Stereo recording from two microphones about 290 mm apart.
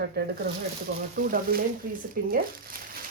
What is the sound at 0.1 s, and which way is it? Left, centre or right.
Speech, right.